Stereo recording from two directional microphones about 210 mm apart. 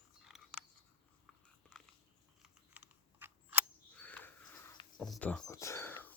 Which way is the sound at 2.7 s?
5° right (ahead or behind).